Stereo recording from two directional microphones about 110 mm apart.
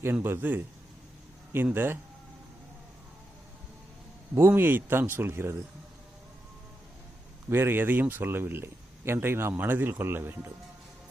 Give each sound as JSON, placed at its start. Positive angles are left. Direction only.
{"t": 0.0, "sound": "speech", "side_deg": -20}
{"t": 4.4, "sound": "speech", "side_deg": -20}
{"t": 7.5, "sound": "speech", "side_deg": -20}